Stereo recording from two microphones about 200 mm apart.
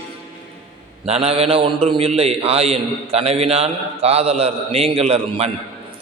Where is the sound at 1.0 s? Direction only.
30° right (ahead or behind).